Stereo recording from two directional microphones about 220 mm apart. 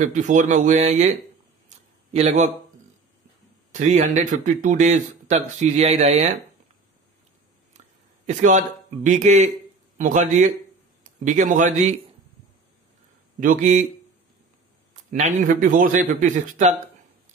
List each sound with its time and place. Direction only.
0.0 s speech: 35° right (ahead or behind)
1.7 s a sound: 30° right (ahead or behind)
2.1 s speech: 30° right (ahead or behind)
3.7 s speech: 35° right (ahead or behind)
8.3 s a man's voice: 35° right (ahead or behind)
13.4 s speech: 35° right (ahead or behind)
15.0 s speech: 35° right (ahead or behind)